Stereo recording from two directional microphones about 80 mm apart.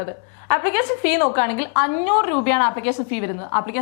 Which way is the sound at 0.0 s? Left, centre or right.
Left.